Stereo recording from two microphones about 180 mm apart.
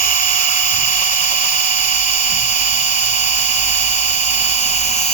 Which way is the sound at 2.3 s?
45° left (ahead or behind).